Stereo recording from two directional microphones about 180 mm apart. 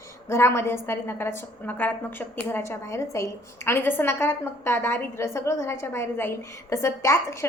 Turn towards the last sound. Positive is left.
turn(degrees=15)  # may be behind; listen again after turning